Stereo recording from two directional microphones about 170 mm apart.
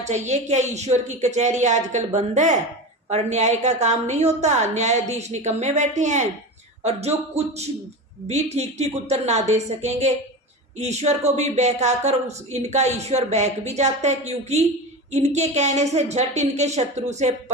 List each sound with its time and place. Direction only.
0.1 s a woman's voice: 45° right (ahead or behind)